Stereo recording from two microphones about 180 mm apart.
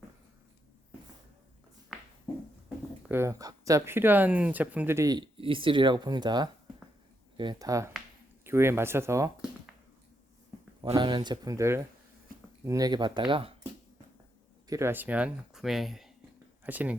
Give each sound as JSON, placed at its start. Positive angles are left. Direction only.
{"t": 1.9, "sound": "a sound", "side_deg": 0}
{"t": 2.6, "sound": "speech", "side_deg": -10}
{"t": 10.9, "sound": "speech", "side_deg": -25}
{"t": 12.3, "sound": "a sound", "side_deg": -50}
{"t": 12.6, "sound": "speech", "side_deg": -20}
{"t": 14.7, "sound": "speech", "side_deg": -15}